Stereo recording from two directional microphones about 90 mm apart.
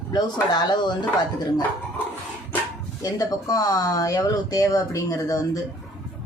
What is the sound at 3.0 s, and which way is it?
Speech, 40° left (ahead or behind).